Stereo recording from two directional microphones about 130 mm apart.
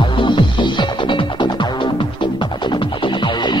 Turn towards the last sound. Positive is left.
turn(degrees=35)  # may be behind; listen again after turning